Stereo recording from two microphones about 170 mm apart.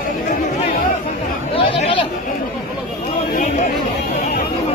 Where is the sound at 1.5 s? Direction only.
35° left (ahead or behind).